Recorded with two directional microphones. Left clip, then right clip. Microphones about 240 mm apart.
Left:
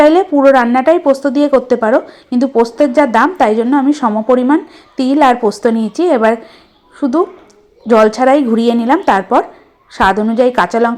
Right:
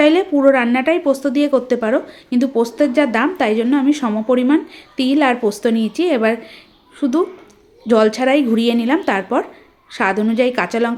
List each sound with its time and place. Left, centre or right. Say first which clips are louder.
0.0 s a woman's voice: left 5 dB; centre